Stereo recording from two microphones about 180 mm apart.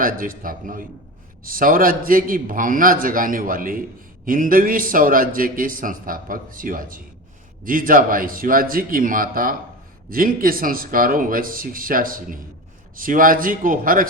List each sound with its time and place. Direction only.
0.0 s a man's voice: 50° right (ahead or behind)